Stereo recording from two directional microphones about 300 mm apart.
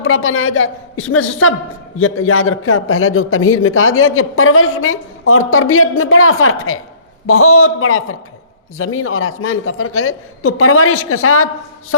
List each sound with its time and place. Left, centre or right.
0.0 s a man's voice: left